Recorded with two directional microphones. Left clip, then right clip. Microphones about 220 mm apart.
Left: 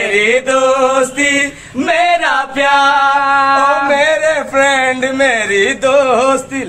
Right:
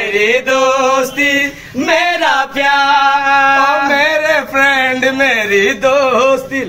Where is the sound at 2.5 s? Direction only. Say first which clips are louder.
Left 2 dB; 10° left (ahead or behind).